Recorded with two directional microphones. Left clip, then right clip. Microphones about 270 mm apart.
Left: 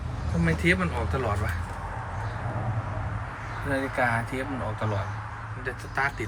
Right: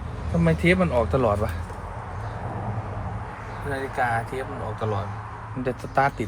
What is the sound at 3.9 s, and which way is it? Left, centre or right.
Speech, centre.